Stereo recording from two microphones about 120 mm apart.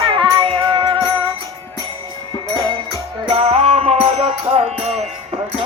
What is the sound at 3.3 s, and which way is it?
Music, 60° right (ahead or behind).